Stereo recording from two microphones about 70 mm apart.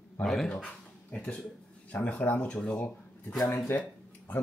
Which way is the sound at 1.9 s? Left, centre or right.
Left.